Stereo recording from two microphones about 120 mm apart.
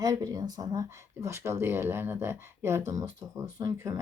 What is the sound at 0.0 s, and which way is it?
Speech, 30° right (ahead or behind).